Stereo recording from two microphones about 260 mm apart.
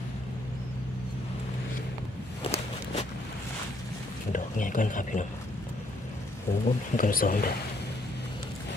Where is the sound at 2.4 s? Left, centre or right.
Left.